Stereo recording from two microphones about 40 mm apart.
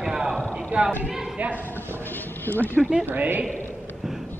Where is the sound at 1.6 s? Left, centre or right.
Left.